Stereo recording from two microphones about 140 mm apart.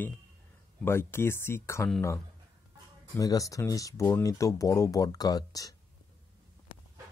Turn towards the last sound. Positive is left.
turn(degrees=25)  # may be behind; listen again after turning